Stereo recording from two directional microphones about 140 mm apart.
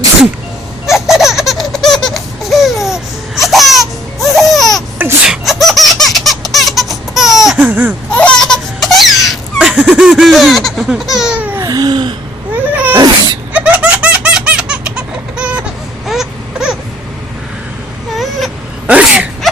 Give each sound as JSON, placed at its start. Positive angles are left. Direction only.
{"t": 0.9, "sound": "laughter", "side_deg": 0}
{"t": 8.1, "sound": "laughter", "side_deg": 10}
{"t": 11.6, "sound": "babbling", "side_deg": -25}
{"t": 12.7, "sound": "sneeze", "side_deg": -10}
{"t": 13.5, "sound": "baby laughter", "side_deg": -10}
{"t": 16.0, "sound": "baby cry", "side_deg": -5}
{"t": 18.2, "sound": "wail", "side_deg": 0}